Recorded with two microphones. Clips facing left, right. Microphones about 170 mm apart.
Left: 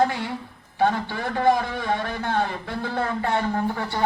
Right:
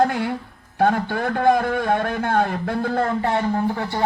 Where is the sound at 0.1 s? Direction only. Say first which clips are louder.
Right 5 dB; 55° right (ahead or behind).